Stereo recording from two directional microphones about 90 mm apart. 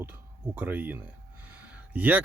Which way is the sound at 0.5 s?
20° right (ahead or behind).